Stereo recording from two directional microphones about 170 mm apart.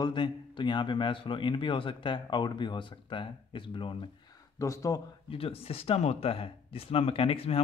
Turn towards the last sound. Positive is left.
turn(degrees=35)  # may be behind; listen again after turning